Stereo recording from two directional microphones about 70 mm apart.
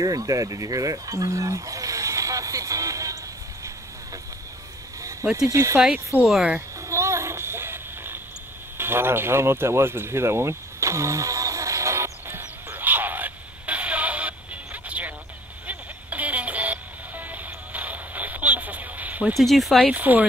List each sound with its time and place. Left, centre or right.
0.0 s speech: right
5.5 s speech: right
6.1 s speech: right
6.9 s a sound: right
15.6 s music: right
19.3 s speech: centre
19.8 s speech: right